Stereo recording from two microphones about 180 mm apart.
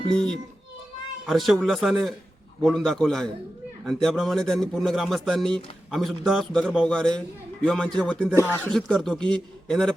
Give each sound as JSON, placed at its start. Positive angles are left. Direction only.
{"t": 0.1, "sound": "speech", "side_deg": 5}